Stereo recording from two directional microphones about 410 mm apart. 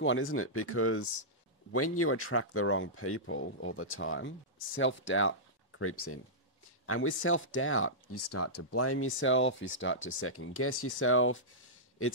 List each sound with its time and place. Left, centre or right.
0.0 s speech: left
8.1 s speech: left